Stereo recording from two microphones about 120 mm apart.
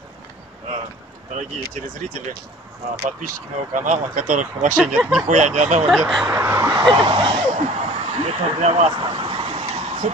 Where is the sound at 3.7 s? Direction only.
90° right.